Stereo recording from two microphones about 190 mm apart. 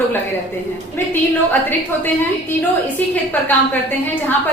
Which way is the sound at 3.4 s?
10° left (ahead or behind).